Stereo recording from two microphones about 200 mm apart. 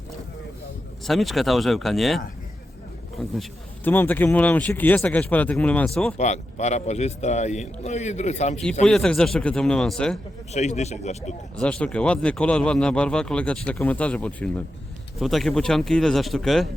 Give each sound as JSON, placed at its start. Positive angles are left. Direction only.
{"t": 1.0, "sound": "speech", "side_deg": 0}
{"t": 3.8, "sound": "speech", "side_deg": 10}
{"t": 6.1, "sound": "a man's voice", "side_deg": 35}
{"t": 8.9, "sound": "speech", "side_deg": 5}
{"t": 10.5, "sound": "a man's voice", "side_deg": 35}
{"t": 11.5, "sound": "speech", "side_deg": 5}